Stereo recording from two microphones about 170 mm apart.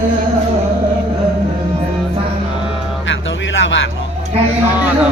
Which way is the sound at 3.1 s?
90° left.